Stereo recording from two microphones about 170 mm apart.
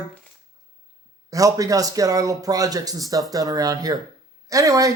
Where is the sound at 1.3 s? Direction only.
20° right (ahead or behind).